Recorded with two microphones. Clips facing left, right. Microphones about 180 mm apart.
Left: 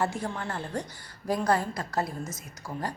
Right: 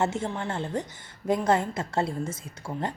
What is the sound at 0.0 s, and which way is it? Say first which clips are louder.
A woman's voice: right 3 dB; 25° right (ahead or behind).